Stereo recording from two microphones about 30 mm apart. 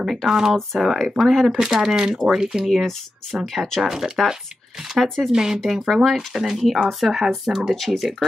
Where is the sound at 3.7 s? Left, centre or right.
Centre.